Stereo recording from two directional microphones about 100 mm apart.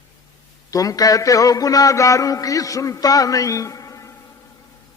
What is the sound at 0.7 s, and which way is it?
A man's voice, 35° left (ahead or behind).